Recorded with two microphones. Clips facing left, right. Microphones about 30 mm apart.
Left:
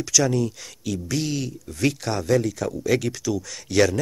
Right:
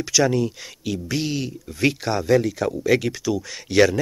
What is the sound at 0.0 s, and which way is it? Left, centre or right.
Speech, centre.